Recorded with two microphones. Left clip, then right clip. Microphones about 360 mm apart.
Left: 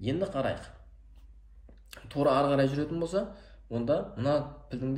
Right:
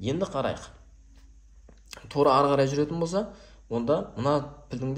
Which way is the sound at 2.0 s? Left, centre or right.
Centre.